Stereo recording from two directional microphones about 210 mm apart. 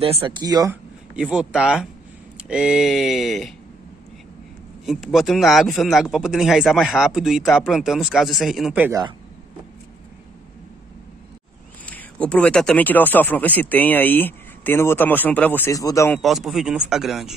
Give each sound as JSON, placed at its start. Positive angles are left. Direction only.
{"t": 0.0, "sound": "speech", "side_deg": -25}
{"t": 1.1, "sound": "speech", "side_deg": -5}
{"t": 4.8, "sound": "speech", "side_deg": 0}
{"t": 11.8, "sound": "speech", "side_deg": 5}
{"t": 16.2, "sound": "speech", "side_deg": 0}